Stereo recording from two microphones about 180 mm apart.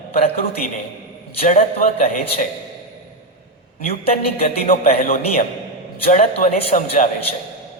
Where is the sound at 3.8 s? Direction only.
35° left (ahead or behind).